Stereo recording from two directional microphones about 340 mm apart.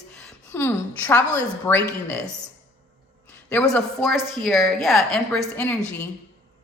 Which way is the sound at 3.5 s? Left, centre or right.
Centre.